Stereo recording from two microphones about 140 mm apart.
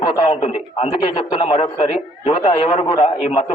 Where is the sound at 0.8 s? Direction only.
30° left (ahead or behind).